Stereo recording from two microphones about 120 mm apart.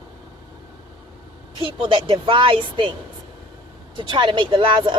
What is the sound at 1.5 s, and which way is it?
A woman's voice, 45° right (ahead or behind).